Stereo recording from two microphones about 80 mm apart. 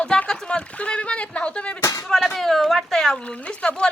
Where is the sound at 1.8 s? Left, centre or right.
Left.